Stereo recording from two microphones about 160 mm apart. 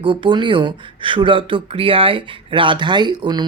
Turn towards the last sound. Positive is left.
turn(degrees=-30)  # may be behind; listen again after turning